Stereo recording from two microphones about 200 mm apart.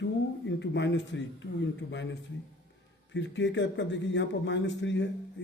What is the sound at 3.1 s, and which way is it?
A man's voice, 65° left (ahead or behind).